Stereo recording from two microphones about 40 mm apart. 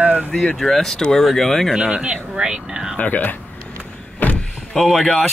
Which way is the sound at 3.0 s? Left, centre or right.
Left.